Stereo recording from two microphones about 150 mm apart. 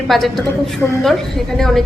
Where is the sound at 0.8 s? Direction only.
10° left (ahead or behind).